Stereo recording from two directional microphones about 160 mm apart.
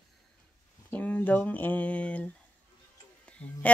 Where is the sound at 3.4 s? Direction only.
10° left (ahead or behind).